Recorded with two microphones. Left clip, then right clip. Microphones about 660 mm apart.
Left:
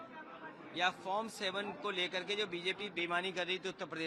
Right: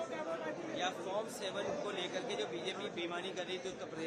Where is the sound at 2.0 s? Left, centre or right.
Left.